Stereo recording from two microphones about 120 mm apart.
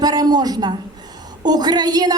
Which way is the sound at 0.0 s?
35° right (ahead or behind).